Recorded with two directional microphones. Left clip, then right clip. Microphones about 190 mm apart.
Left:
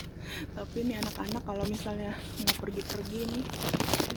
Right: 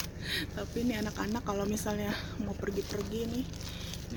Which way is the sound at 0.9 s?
5° left (ahead or behind).